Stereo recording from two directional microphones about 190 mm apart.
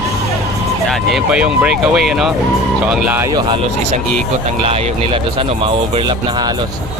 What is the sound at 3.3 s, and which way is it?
Speech, 25° right (ahead or behind).